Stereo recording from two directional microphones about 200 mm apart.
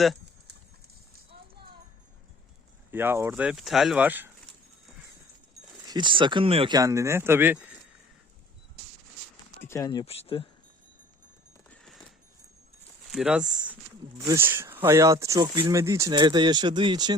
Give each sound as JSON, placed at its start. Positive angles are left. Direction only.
{"t": 2.9, "sound": "speech", "side_deg": -10}
{"t": 5.9, "sound": "speech", "side_deg": -25}
{"t": 9.6, "sound": "speech", "side_deg": 15}
{"t": 11.7, "sound": "a sound", "side_deg": 0}
{"t": 13.1, "sound": "speech", "side_deg": -5}